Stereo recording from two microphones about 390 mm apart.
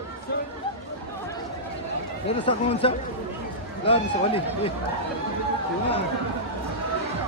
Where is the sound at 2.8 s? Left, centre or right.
Centre.